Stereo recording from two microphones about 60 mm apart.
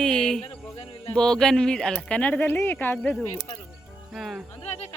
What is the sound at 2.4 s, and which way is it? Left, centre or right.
Speech, left.